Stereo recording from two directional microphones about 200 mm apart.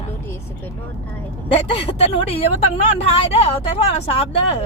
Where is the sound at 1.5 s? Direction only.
30° left (ahead or behind).